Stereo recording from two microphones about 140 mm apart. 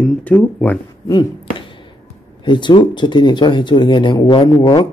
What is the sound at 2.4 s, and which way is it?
Speech, 35° left (ahead or behind).